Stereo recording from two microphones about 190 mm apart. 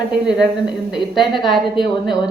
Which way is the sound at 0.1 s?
5° right (ahead or behind).